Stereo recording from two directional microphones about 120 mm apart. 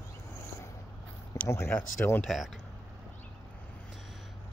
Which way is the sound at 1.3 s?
20° left (ahead or behind).